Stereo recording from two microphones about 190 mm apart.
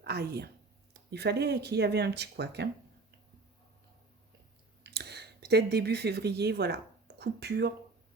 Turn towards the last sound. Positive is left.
turn(degrees=-60)  # may be behind; listen again after turning